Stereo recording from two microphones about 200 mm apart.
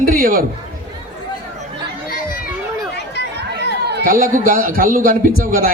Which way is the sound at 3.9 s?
50° right (ahead or behind).